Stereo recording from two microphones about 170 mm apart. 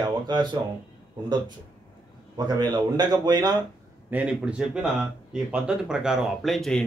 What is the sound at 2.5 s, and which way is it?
Speech, 25° right (ahead or behind).